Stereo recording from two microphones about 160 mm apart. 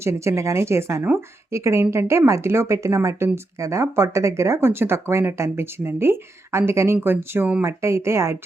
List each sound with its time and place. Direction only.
0.0 s speech: 20° right (ahead or behind)